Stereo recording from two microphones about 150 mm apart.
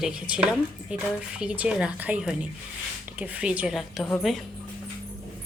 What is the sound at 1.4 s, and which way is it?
Speech, 5° right (ahead or behind).